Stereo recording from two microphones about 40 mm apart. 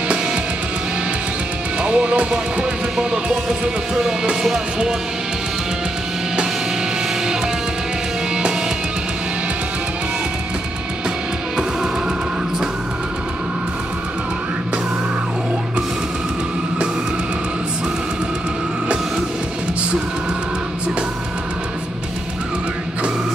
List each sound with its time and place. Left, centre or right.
1.8 s speech: right